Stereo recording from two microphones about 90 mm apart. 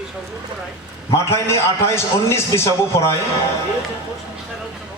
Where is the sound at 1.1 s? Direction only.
30° left (ahead or behind).